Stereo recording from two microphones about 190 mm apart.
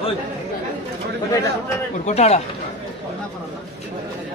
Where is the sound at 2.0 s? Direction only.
35° left (ahead or behind).